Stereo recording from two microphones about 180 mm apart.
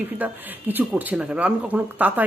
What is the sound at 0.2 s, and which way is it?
Speech, 10° right (ahead or behind).